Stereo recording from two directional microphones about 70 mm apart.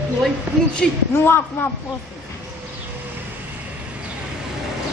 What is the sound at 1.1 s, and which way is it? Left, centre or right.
Speech, left.